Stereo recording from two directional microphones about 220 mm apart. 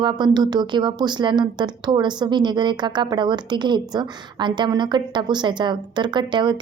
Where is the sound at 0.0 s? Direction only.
20° right (ahead or behind).